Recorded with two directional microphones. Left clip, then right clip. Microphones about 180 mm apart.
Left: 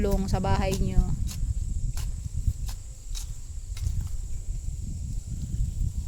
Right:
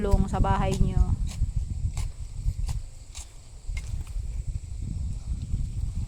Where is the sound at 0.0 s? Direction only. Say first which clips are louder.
Even; 40° left (ahead or behind).